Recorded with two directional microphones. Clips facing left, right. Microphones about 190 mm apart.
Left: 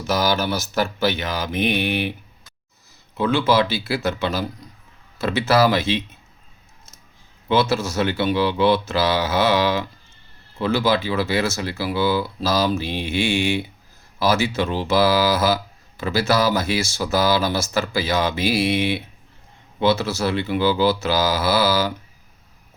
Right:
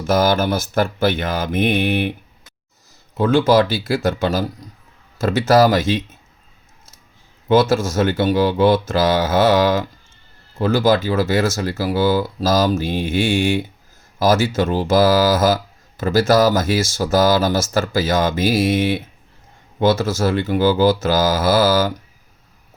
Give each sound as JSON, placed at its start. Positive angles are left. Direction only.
{"t": 0.1, "sound": "speech", "side_deg": -50}
{"t": 3.2, "sound": "speech", "side_deg": -45}
{"t": 7.4, "sound": "speech", "side_deg": -45}